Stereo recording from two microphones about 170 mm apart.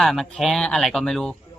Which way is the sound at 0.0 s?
Centre (ahead or behind).